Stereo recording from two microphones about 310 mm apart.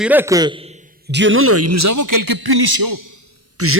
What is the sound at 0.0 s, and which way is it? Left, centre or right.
Speech, centre.